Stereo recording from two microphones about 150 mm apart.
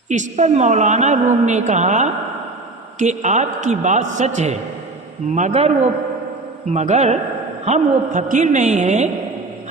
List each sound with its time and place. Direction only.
0.1 s a woman's voice: 50° right (ahead or behind)